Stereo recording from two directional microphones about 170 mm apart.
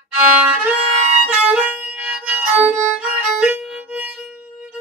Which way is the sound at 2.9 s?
5° right (ahead or behind).